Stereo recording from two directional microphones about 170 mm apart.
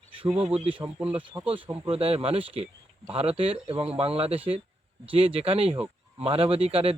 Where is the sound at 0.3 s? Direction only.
30° right (ahead or behind).